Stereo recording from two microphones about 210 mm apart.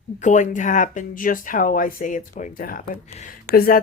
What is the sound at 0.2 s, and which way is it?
Speech, 35° left (ahead or behind).